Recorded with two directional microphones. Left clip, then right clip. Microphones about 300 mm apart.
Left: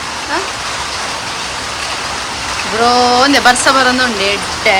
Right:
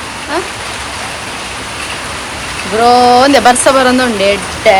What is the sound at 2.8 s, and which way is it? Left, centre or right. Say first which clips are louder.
Speech: right 4 dB; centre.